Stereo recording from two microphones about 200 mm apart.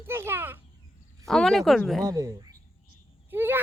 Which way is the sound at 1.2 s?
5° left (ahead or behind).